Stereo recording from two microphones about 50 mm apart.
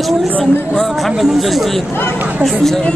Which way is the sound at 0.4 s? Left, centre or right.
Centre.